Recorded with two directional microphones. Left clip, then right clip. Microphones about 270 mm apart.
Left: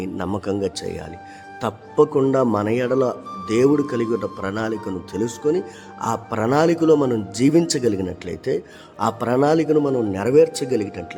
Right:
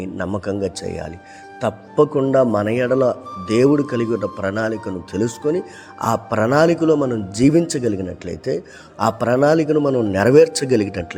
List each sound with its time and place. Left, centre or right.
0.0 s speech: centre
10.1 s speech: centre